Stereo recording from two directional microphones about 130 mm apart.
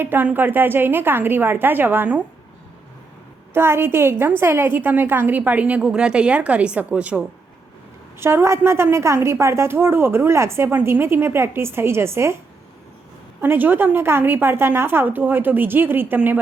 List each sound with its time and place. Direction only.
0.0 s a woman's voice: 15° right (ahead or behind)
3.5 s a woman's voice: 20° right (ahead or behind)
8.2 s a woman's voice: 20° right (ahead or behind)
13.4 s a woman's voice: 15° right (ahead or behind)